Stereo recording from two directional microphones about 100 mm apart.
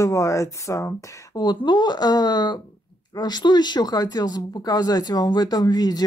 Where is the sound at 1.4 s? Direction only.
45° left (ahead or behind).